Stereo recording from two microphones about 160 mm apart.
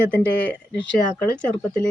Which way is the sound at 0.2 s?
10° left (ahead or behind).